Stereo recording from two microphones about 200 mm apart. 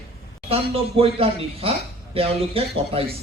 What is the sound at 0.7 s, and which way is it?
A man's voice, 30° right (ahead or behind).